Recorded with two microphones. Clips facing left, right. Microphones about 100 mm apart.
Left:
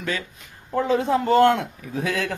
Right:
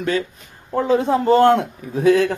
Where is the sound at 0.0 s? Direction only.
40° right (ahead or behind).